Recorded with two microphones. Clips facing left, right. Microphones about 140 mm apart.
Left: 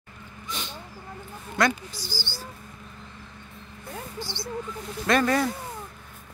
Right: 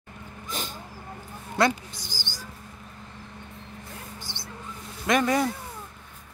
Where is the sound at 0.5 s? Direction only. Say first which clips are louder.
Right 1 dB; 45° right (ahead or behind).